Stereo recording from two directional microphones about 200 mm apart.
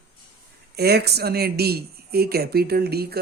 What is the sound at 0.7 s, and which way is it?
Speech, 55° right (ahead or behind).